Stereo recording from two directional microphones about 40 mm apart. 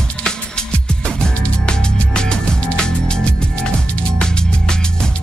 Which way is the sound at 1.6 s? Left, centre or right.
Left.